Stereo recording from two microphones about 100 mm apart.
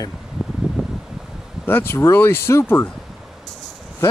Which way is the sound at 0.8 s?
5° right (ahead or behind).